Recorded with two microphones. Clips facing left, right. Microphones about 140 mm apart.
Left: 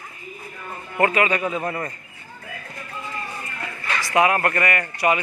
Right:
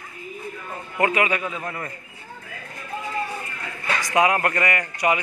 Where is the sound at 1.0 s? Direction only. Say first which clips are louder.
Left 2 dB; 15° right (ahead or behind).